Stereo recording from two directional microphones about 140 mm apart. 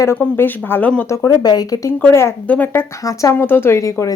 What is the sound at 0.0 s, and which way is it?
Speech, 15° left (ahead or behind).